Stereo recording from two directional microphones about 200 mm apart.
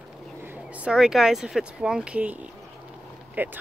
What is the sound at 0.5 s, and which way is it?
Speech, 5° right (ahead or behind).